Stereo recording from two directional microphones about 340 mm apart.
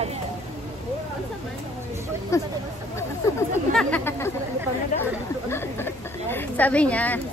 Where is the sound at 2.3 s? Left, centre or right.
Centre.